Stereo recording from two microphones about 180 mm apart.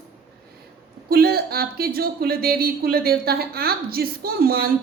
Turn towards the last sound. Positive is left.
turn(degrees=-55)  # may be behind; listen again after turning